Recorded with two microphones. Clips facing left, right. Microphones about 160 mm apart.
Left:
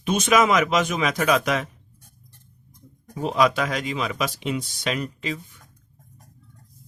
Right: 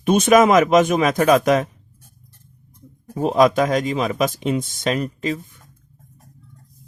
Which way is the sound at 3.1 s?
40° right (ahead or behind).